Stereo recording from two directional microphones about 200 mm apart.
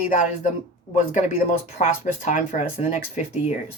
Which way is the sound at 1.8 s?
40° left (ahead or behind).